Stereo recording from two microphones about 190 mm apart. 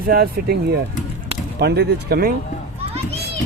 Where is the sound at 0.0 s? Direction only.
50° right (ahead or behind).